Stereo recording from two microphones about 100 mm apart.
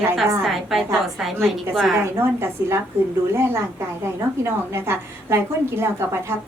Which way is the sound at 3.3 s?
25° right (ahead or behind).